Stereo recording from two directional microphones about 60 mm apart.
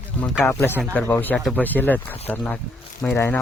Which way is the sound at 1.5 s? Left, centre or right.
Left.